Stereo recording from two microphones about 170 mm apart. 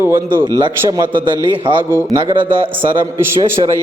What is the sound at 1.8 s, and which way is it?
Speech, 15° right (ahead or behind).